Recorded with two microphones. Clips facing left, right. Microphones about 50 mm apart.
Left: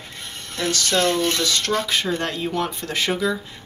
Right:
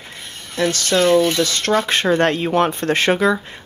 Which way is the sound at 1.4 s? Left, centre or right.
Right.